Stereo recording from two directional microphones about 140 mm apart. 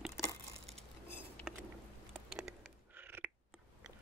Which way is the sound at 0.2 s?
5° right (ahead or behind).